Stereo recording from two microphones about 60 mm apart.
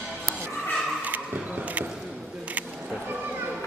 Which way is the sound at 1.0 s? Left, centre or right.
Right.